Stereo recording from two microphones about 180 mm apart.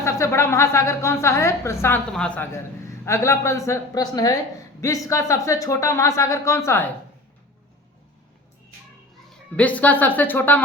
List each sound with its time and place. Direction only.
0.0 s a man's voice: 15° left (ahead or behind)
9.3 s a man's voice: 10° left (ahead or behind)